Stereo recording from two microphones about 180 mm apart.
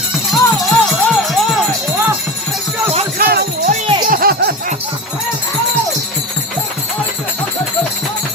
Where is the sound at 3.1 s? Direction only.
55° right (ahead or behind).